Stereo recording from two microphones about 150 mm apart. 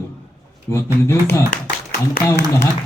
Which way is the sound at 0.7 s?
15° left (ahead or behind).